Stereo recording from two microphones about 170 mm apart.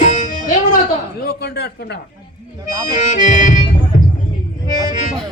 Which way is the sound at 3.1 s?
45° left (ahead or behind).